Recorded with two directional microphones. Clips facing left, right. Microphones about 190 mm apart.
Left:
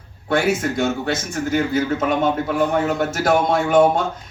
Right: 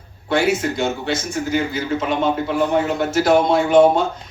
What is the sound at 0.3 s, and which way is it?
Speech, 50° left (ahead or behind).